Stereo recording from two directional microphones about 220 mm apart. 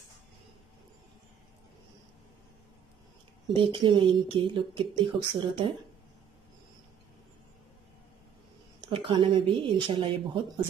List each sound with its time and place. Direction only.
3.5 s a woman's voice: 20° right (ahead or behind)
8.8 s a woman's voice: 20° right (ahead or behind)